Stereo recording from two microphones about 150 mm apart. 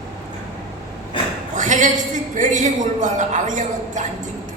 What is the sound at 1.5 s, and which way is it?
A man's voice, 55° right (ahead or behind).